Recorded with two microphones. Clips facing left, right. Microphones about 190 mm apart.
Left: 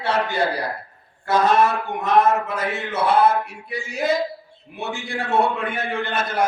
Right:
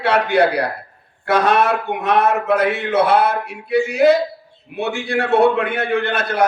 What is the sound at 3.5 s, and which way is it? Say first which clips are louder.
A man's voice: right 13 dB; 65° right (ahead or behind).